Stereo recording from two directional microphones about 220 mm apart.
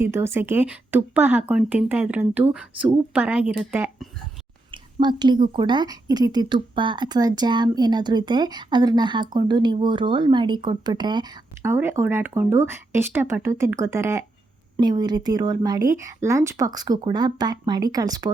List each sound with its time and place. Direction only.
0.0 s speech: 10° right (ahead or behind)
4.7 s a woman's voice: 20° right (ahead or behind)